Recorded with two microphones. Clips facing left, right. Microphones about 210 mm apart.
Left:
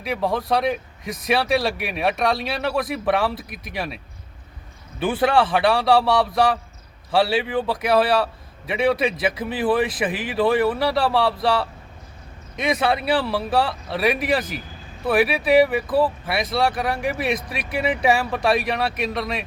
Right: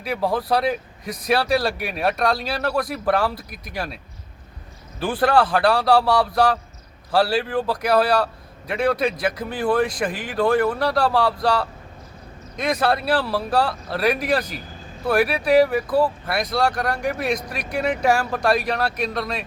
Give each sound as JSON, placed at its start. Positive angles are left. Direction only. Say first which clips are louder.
{"t": 0.0, "sound": "a man's voice", "louder": "even", "side_deg": 0}